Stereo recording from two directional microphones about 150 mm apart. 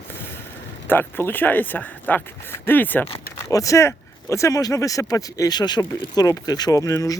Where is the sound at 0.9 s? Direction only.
15° left (ahead or behind).